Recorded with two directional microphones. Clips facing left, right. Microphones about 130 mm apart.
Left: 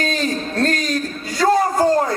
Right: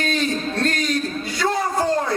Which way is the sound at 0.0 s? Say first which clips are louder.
Left 1 dB; 40° left (ahead or behind).